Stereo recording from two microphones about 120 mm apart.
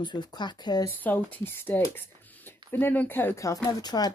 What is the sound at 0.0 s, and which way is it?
Speech, 35° left (ahead or behind).